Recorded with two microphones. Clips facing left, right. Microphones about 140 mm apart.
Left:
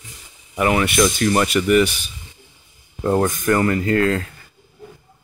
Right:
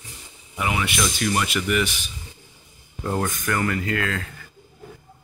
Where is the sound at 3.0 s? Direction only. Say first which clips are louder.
Left 7 dB; 40° left (ahead or behind).